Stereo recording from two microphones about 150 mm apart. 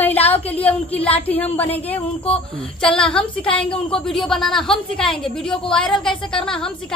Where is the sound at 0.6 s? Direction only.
10° left (ahead or behind).